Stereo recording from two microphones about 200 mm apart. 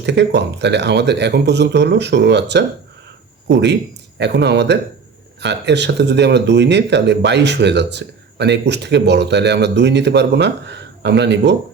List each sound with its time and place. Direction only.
0.0 s speech: 60° right (ahead or behind)